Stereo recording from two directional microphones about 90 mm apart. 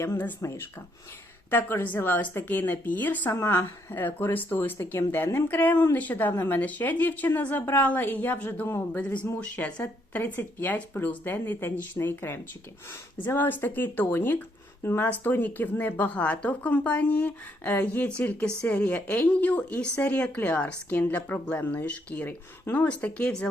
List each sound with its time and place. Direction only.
0.0 s speech: 25° left (ahead or behind)